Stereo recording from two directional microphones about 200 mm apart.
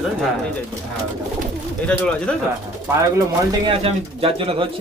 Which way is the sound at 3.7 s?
30° right (ahead or behind).